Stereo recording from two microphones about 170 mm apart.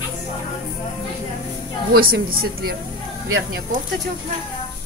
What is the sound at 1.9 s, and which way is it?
Speech, 65° right (ahead or behind).